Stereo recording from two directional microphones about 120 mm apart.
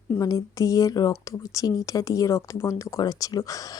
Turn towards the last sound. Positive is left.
turn(degrees=30)  # may be behind; listen again after turning